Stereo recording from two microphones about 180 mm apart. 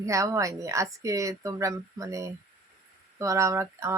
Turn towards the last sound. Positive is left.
turn(degrees=-15)  # may be behind; listen again after turning